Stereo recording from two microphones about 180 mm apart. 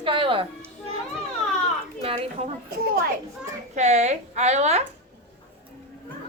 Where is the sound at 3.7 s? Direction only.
40° right (ahead or behind).